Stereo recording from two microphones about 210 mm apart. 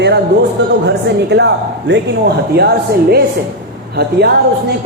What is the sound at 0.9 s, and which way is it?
Speech, 55° right (ahead or behind).